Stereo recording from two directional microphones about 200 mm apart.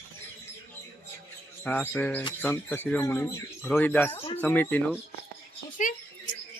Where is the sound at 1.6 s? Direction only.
5° left (ahead or behind).